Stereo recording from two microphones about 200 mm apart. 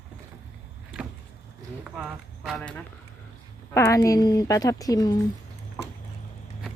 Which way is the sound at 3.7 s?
15° left (ahead or behind).